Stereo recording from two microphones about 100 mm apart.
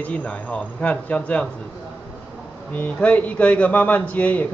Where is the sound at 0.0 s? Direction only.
15° left (ahead or behind).